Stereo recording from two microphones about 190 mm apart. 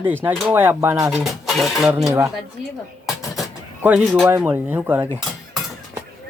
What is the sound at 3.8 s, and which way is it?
Speech, 5° right (ahead or behind).